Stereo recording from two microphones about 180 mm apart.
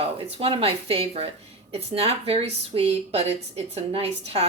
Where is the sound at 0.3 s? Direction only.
35° right (ahead or behind).